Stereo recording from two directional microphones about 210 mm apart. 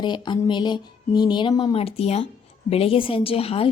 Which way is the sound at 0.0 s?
20° left (ahead or behind).